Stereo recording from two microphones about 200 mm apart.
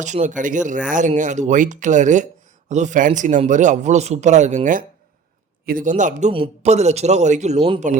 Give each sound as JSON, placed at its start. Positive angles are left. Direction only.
{"t": 0.0, "sound": "a man's voice", "side_deg": -35}